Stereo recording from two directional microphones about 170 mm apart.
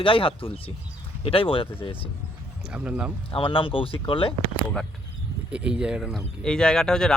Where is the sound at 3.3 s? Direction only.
30° left (ahead or behind).